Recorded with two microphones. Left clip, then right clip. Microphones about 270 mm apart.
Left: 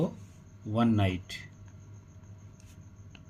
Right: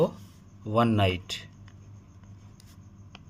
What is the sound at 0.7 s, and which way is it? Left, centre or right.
Speech, right.